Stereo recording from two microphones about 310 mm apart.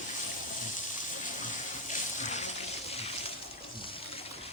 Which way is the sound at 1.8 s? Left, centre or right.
Left.